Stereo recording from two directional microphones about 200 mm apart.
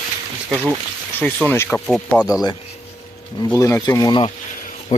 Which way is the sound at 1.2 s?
5° left (ahead or behind).